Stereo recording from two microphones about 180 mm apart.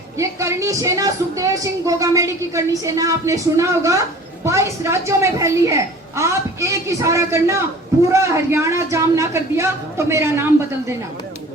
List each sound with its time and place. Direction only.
0.2 s a woman's voice: 15° right (ahead or behind)